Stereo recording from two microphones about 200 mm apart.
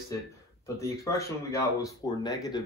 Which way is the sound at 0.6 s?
15° left (ahead or behind).